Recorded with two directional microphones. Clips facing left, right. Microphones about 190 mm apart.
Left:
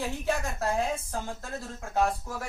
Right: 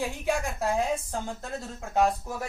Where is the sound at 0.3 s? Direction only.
15° right (ahead or behind).